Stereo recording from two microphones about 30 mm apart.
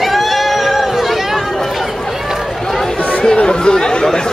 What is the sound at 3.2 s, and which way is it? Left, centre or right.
Chatter, left.